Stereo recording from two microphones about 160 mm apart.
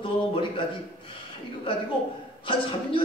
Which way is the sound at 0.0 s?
30° left (ahead or behind).